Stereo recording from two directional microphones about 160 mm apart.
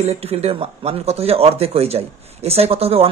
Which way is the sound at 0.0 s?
40° right (ahead or behind).